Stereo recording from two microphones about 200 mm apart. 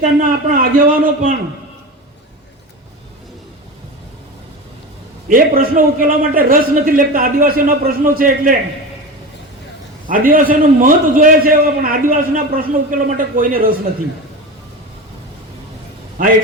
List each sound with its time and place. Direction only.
0.2 s a man's voice: 45° right (ahead or behind)
5.3 s a man's voice: 45° right (ahead or behind)
10.1 s a man's voice: 45° right (ahead or behind)